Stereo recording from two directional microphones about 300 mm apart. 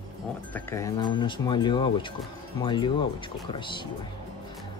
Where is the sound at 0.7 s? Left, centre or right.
Centre.